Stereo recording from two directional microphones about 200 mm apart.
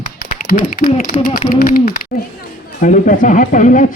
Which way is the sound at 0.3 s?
45° left (ahead or behind).